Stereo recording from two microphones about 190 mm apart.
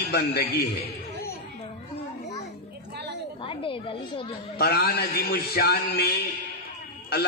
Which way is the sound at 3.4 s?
25° left (ahead or behind).